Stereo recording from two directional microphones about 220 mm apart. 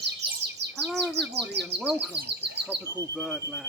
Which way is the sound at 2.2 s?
50° right (ahead or behind).